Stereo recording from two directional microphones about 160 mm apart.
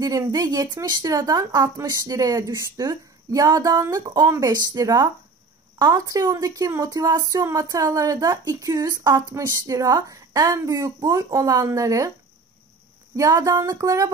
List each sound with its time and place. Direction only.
0.0 s speech: 25° right (ahead or behind)
13.1 s speech: 20° right (ahead or behind)